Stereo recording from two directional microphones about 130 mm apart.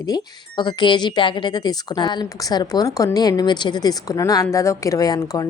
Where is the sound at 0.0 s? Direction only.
35° left (ahead or behind).